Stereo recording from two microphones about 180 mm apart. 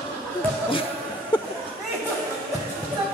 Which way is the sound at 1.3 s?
25° left (ahead or behind).